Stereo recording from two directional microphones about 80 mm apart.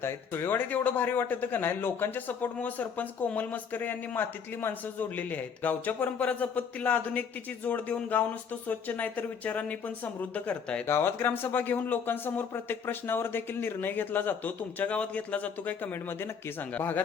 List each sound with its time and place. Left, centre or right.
0.0 s a man's voice: left; by 10.8 s centre
10.8 s a man's voice: left